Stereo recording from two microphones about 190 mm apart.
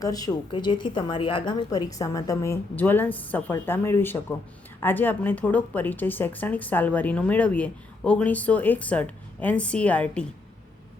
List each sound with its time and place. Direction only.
0.0 s a woman's voice: 20° left (ahead or behind)